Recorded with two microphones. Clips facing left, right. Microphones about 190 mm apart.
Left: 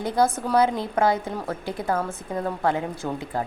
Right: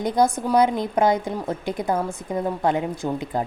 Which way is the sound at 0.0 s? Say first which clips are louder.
Right 2 dB; 15° right (ahead or behind).